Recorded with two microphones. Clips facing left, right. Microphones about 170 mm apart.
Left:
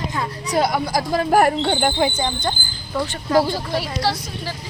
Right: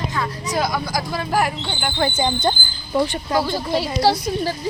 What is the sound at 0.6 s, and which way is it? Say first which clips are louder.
Speech: left 3 dB; 30° left (ahead or behind).